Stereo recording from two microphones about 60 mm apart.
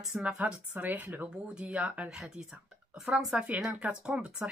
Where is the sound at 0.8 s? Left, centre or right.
Right.